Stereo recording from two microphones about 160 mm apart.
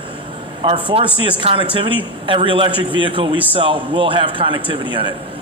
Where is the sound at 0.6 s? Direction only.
30° right (ahead or behind).